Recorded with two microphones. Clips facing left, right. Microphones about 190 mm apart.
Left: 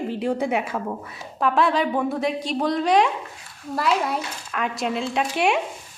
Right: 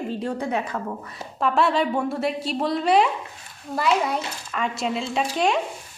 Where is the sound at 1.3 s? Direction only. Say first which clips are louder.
Even; centre (ahead or behind).